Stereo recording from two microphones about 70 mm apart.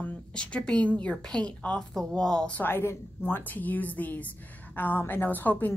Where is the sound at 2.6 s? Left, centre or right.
Left.